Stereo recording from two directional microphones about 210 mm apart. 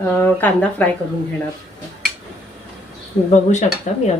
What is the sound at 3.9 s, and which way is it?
Speech, 35° left (ahead or behind).